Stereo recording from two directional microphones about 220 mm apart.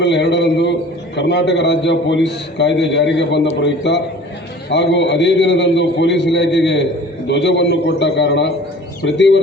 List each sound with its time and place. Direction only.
0.0 s a man's voice: 50° left (ahead or behind)